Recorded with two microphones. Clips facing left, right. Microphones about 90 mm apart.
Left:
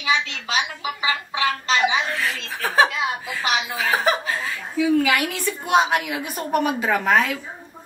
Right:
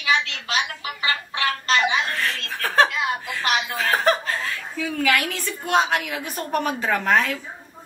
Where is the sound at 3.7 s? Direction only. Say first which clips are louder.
Right 1 dB; 5° left (ahead or behind).